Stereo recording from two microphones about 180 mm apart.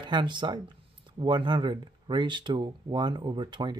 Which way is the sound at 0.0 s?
25° right (ahead or behind).